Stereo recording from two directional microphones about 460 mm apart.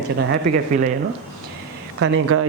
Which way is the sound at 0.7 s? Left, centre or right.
Centre.